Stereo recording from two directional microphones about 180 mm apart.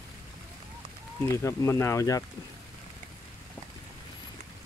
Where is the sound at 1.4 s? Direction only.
15° left (ahead or behind).